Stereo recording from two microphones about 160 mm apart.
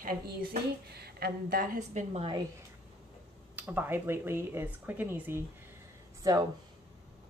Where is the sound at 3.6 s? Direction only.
10° right (ahead or behind).